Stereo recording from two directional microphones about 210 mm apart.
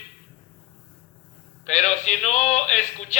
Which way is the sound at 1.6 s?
35° left (ahead or behind).